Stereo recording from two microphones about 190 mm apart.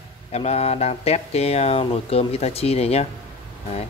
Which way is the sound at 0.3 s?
35° left (ahead or behind).